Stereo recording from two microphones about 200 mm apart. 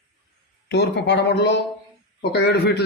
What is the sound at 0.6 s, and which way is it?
Speech, 60° left (ahead or behind).